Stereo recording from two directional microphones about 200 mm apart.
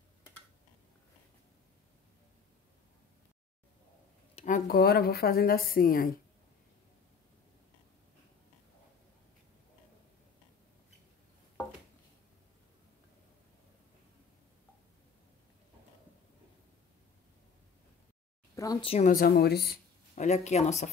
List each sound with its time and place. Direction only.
4.4 s speech: 45° left (ahead or behind)
18.6 s speech: 20° left (ahead or behind)
18.9 s speech: 45° left (ahead or behind)
20.2 s speech: 35° left (ahead or behind)